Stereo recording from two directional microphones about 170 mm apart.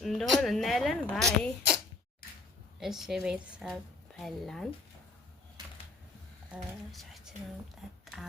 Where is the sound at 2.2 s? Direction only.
60° left (ahead or behind).